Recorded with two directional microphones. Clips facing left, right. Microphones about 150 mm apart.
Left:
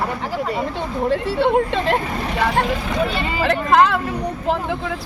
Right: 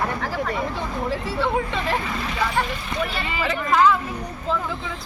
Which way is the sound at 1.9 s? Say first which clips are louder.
Left 4 dB; 45° left (ahead or behind).